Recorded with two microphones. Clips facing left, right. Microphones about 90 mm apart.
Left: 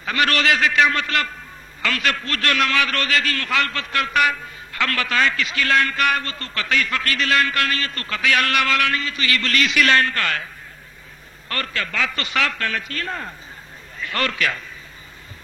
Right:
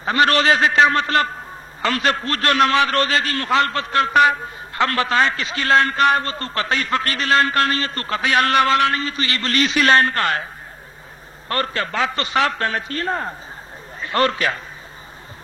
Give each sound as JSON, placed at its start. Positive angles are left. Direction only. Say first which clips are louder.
{"t": 0.0, "sound": "a man's voice", "louder": "right 4 dB", "side_deg": -30}